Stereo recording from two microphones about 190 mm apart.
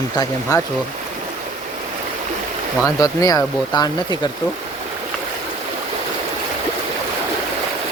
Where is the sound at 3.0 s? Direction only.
20° left (ahead or behind).